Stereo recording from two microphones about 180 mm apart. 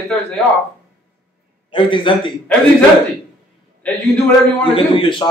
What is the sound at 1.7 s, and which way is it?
Speech, 30° left (ahead or behind).